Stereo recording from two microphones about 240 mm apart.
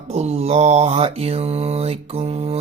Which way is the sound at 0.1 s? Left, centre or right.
Right.